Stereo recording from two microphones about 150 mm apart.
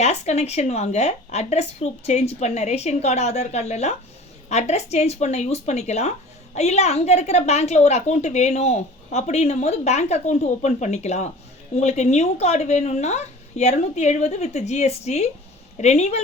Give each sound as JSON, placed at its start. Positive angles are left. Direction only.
{"t": 0.0, "sound": "speech", "side_deg": 45}